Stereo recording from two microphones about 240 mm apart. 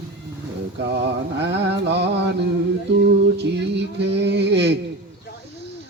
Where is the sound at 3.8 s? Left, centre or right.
Right.